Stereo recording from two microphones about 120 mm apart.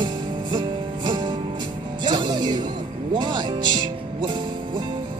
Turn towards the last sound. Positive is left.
turn(degrees=-40)  # may be behind; listen again after turning